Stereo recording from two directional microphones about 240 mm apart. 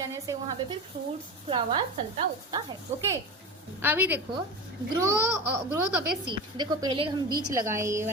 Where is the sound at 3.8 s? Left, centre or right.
Centre.